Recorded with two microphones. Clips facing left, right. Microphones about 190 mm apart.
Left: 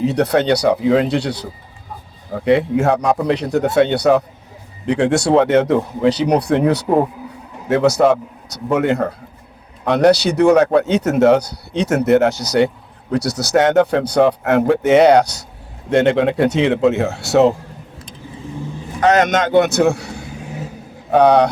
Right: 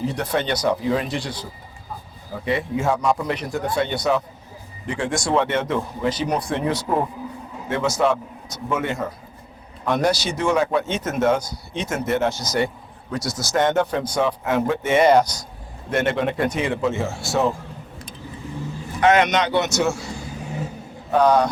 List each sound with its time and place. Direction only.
0.0 s speech: 70° left (ahead or behind)
5.4 s a man's voice: 80° left
6.0 s speech: 70° left (ahead or behind)
6.8 s a man's voice: 35° left (ahead or behind)
7.7 s speech: 65° left (ahead or behind)
15.9 s speech: 90° left; by 17.5 s 70° left (ahead or behind)
18.9 s a man's voice: 40° left (ahead or behind); by 21.5 s 65° left (ahead or behind)